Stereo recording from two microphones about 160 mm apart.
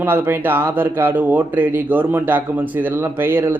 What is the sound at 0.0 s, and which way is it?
Speech, 15° right (ahead or behind).